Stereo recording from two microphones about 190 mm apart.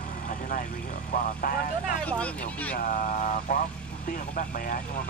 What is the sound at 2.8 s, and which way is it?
Speech, 45° left (ahead or behind).